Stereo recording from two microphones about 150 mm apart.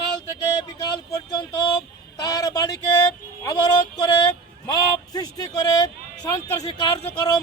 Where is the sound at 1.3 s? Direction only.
30° left (ahead or behind).